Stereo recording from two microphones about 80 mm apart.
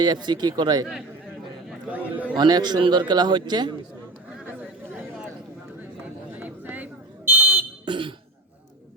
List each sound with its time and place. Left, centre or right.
0.0 s speech: right
1.9 s a man's voice: centre
2.3 s a man's voice: right
6.4 s buzzer: right
7.9 s cough: right